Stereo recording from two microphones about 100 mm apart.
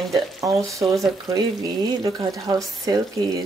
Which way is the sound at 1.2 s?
40° right (ahead or behind).